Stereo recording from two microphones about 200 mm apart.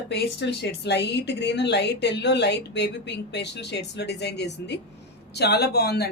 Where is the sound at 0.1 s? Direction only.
60° left (ahead or behind).